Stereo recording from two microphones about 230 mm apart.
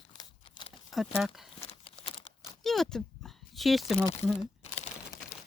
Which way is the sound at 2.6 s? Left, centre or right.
Centre.